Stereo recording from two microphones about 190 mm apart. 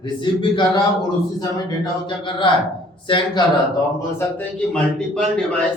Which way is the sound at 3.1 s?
25° left (ahead or behind).